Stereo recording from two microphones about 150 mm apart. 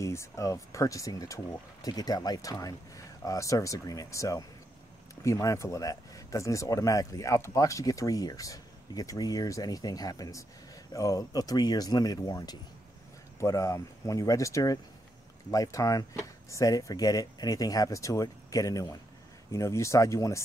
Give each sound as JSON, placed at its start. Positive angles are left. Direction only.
{"t": 0.0, "sound": "speech", "side_deg": 20}